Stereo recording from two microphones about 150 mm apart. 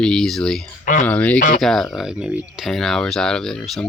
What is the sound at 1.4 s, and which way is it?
Speech, 60° left (ahead or behind).